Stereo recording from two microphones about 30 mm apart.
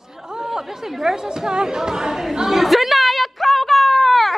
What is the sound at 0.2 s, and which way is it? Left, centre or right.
Chatter, centre.